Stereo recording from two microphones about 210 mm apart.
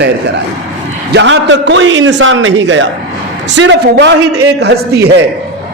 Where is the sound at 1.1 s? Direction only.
60° right (ahead or behind).